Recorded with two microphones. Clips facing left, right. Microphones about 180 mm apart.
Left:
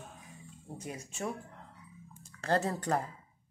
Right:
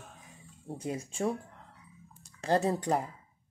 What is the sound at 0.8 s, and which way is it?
Speech, 30° right (ahead or behind).